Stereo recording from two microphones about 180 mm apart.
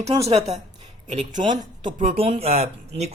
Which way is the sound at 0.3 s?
35° right (ahead or behind).